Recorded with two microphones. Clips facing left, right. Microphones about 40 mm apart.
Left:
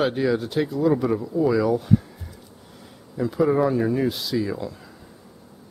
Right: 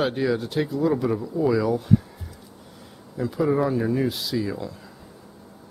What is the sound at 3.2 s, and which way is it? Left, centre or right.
Speech, centre.